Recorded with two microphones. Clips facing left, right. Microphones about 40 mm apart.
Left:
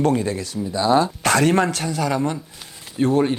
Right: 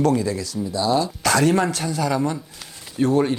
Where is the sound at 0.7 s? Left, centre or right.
Left.